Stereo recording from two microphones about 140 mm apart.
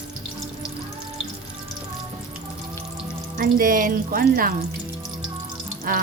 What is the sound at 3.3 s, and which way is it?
Speech, 80° right.